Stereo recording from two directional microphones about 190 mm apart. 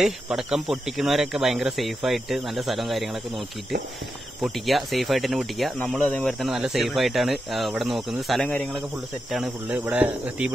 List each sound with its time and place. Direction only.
0.0 s speech: 5° right (ahead or behind)
4.4 s speech: centre (ahead or behind)